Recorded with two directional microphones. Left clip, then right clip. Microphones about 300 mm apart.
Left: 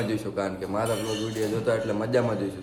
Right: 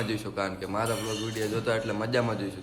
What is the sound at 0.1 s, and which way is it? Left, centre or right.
A man's voice, centre.